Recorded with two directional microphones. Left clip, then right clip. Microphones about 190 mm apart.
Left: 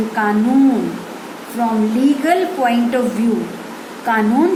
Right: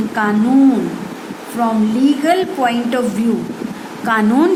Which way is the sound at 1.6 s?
35° right (ahead or behind).